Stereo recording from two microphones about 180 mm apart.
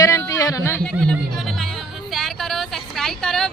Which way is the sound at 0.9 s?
5° left (ahead or behind).